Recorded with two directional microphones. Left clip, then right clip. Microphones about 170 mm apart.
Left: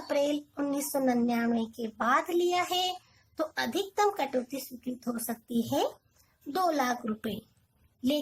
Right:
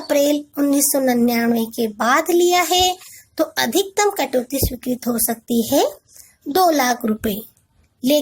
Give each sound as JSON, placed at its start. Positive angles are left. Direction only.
{"t": 0.1, "sound": "speech", "side_deg": -35}